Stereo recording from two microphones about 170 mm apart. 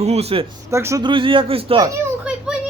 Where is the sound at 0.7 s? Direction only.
15° right (ahead or behind).